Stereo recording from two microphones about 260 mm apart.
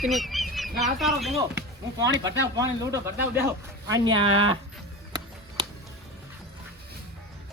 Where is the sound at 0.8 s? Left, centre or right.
Centre.